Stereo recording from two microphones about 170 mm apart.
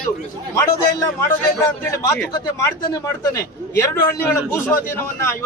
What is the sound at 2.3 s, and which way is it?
A man's voice, 20° left (ahead or behind).